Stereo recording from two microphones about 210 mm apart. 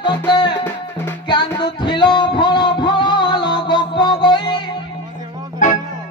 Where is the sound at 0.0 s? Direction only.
20° left (ahead or behind).